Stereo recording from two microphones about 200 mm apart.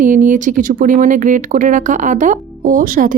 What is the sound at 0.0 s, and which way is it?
A woman's voice, 40° right (ahead or behind).